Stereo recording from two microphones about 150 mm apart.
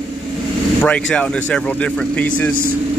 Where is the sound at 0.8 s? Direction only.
10° left (ahead or behind).